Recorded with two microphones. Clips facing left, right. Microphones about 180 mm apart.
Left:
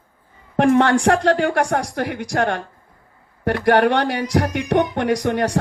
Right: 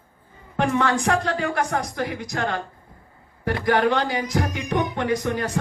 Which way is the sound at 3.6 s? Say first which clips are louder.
Left 4 dB; 70° left (ahead or behind).